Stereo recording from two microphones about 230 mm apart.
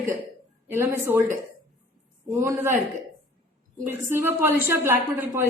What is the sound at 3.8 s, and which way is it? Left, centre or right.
A woman's voice, centre.